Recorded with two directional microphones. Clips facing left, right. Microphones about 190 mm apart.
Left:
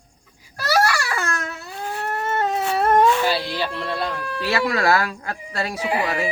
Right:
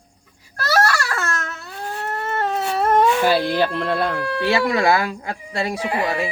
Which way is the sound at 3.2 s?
50° right (ahead or behind).